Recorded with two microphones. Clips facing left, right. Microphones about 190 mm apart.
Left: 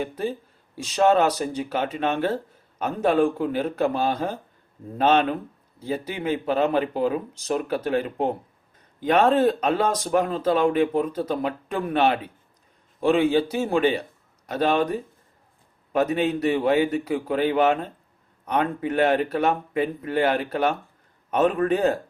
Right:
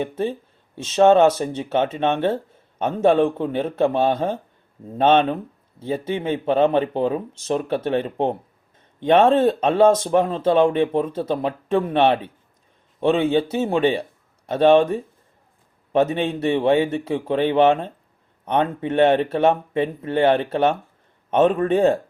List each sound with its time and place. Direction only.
0.0 s speech: 25° right (ahead or behind)